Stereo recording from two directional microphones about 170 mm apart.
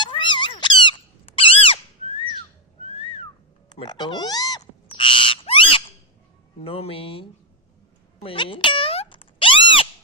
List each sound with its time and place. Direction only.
0.0 s cat: 25° left (ahead or behind)
1.4 s squeak: 35° left (ahead or behind)
2.8 s whistling: 35° left (ahead or behind)
3.7 s speech: 25° left (ahead or behind)
4.9 s owl: 30° left (ahead or behind)
6.6 s speech: 35° left (ahead or behind)
8.2 s a sound: 30° left (ahead or behind)